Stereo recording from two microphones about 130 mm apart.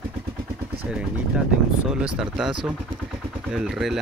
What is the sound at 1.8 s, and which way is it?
Speech, 5° right (ahead or behind).